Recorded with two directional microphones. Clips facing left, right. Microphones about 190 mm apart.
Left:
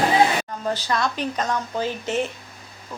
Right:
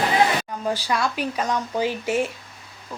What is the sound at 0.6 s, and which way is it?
A woman's voice, 10° right (ahead or behind).